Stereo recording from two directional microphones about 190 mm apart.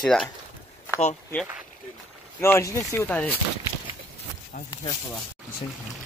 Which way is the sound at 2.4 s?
15° left (ahead or behind).